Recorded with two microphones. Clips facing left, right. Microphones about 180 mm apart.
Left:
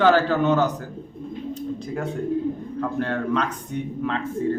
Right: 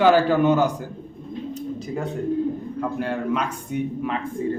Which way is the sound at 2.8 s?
10° right (ahead or behind).